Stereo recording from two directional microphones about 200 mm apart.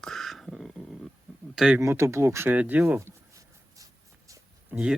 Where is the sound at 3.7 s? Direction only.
15° right (ahead or behind).